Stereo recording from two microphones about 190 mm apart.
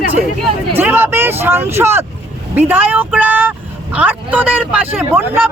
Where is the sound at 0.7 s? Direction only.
10° right (ahead or behind).